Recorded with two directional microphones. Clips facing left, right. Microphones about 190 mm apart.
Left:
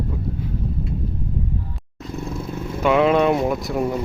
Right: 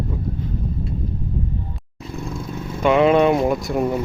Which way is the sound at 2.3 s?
5° left (ahead or behind).